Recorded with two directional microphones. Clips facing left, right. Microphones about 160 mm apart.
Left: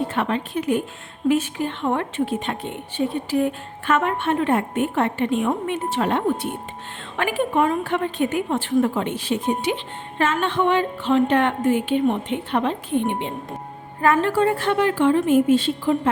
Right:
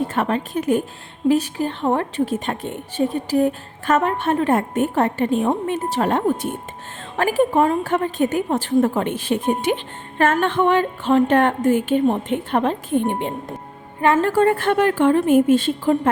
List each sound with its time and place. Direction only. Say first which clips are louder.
0.1 s a woman's voice: right 2 dB; 40° right (ahead or behind)